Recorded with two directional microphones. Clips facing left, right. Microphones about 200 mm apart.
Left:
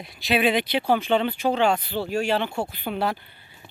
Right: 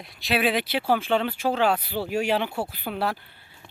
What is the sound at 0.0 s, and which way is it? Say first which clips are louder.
Speech: left 2 dB; centre (ahead or behind).